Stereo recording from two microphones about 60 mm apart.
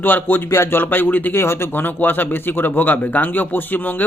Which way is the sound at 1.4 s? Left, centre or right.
Left.